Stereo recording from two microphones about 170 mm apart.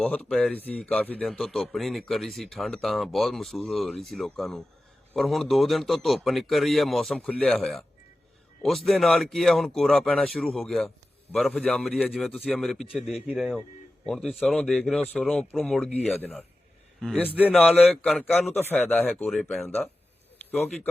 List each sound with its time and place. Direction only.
0.0 s speech: 5° left (ahead or behind)